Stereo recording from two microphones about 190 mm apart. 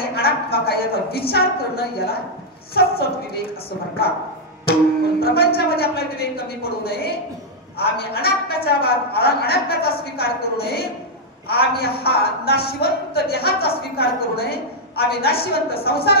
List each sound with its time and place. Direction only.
0.1 s a woman's voice: 55° left (ahead or behind)
5.2 s a man's voice: 55° left (ahead or behind)